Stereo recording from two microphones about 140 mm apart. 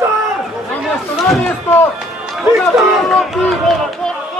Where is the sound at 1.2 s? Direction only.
Centre (ahead or behind).